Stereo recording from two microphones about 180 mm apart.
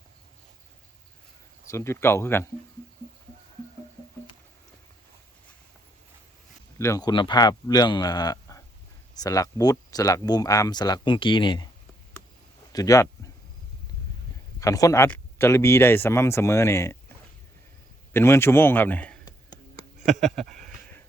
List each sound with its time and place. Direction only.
1.6 s speech: 15° left (ahead or behind)
6.7 s speech: 15° left (ahead or behind)
12.7 s speech: 20° left (ahead or behind)
14.6 s speech: 20° left (ahead or behind)
18.1 s speech: 15° left (ahead or behind)
20.2 s speech: centre (ahead or behind)